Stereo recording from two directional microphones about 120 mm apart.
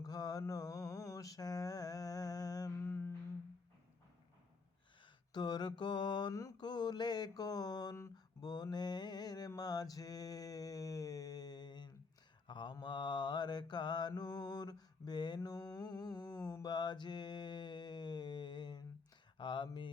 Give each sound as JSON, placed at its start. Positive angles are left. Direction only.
{"t": 0.0, "sound": "mantra", "side_deg": 30}
{"t": 2.7, "sound": "music", "side_deg": 20}
{"t": 5.3, "sound": "mantra", "side_deg": 35}